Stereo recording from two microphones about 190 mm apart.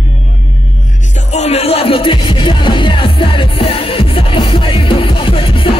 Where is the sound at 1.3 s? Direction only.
35° left (ahead or behind).